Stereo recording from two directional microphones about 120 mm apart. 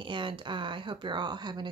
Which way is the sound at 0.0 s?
45° right (ahead or behind).